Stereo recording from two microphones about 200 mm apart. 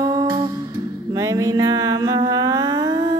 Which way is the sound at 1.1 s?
15° right (ahead or behind).